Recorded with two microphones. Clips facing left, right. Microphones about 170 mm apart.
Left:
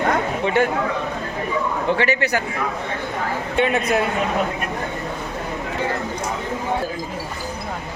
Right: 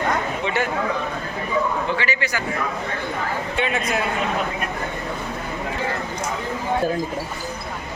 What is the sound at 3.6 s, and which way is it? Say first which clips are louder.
Speech: left 6 dB; 50° left (ahead or behind).